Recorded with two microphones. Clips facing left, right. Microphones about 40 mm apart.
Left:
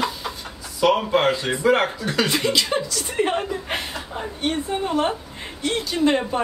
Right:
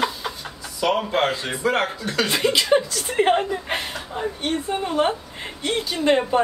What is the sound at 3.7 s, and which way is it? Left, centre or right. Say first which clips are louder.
A woman's voice: right 1 dB; centre.